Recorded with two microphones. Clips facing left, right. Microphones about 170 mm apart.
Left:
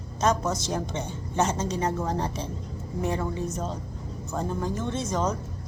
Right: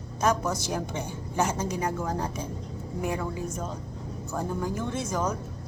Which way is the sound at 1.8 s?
30° left (ahead or behind).